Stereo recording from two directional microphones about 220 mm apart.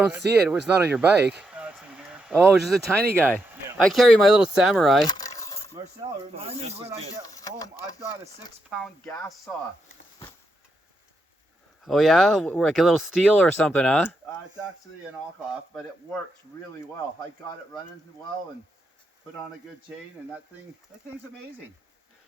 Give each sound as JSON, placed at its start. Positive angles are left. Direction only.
{"t": 0.0, "sound": "speech", "side_deg": -5}
{"t": 5.0, "sound": "coin", "side_deg": 15}
{"t": 6.3, "sound": "speech", "side_deg": -25}
{"t": 7.3, "sound": "speech", "side_deg": 15}
{"t": 8.7, "sound": "speech", "side_deg": -5}
{"t": 11.9, "sound": "speech", "side_deg": 0}